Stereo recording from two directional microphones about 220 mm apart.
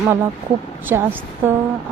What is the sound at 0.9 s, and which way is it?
Speech, 10° right (ahead or behind).